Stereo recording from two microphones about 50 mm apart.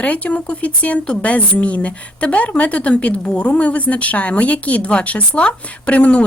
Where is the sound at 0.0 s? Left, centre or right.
Left.